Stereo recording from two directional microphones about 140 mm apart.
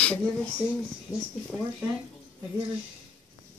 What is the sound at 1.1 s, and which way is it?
Speech, 25° left (ahead or behind).